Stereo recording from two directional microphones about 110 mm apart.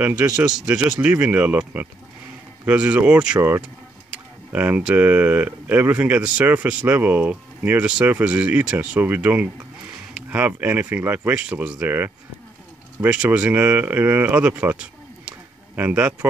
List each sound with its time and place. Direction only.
0.0 s speech: 10° right (ahead or behind)
3.3 s speech: 20° right (ahead or behind)